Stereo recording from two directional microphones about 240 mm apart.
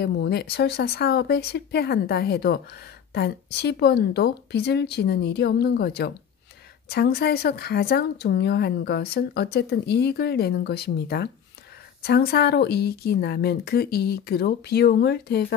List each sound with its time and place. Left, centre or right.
0.0 s a woman's voice: left